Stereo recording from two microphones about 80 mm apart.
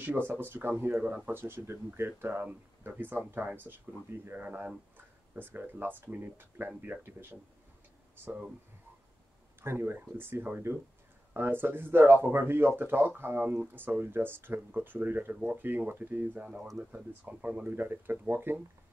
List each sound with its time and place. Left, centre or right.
0.3 s speech: right
9.6 s speech: right